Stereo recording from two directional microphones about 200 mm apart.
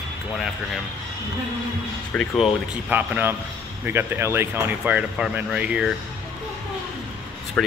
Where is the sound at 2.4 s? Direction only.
10° right (ahead or behind).